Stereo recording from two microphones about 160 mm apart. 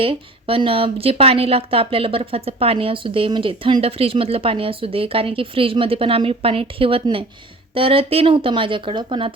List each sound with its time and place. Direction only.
0.0 s a woman's voice: 35° right (ahead or behind)